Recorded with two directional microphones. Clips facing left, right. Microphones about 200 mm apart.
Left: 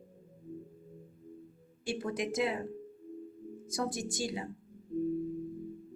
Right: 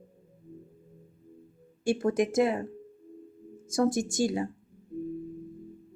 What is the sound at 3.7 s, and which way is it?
Speech, 45° right (ahead or behind).